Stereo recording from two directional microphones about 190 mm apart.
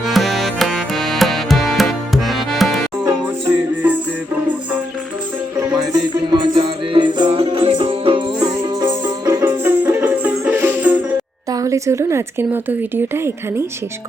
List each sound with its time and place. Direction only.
0.0 s tabla: centre (ahead or behind)
5.5 s music: 20° right (ahead or behind)
13.1 s speech: 15° right (ahead or behind)